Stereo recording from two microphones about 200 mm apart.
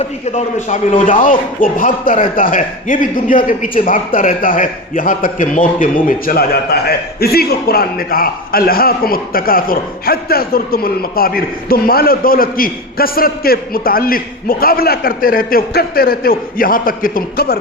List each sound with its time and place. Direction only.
0.0 s a man's voice: 35° left (ahead or behind); by 17.6 s 50° left (ahead or behind)